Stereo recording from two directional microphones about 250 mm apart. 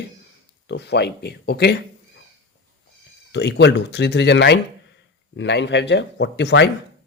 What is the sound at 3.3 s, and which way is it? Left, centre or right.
Speech, left.